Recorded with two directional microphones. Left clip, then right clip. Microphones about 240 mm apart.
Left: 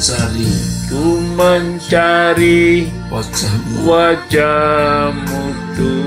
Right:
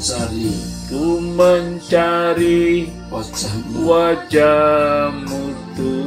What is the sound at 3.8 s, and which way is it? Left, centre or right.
Music, centre.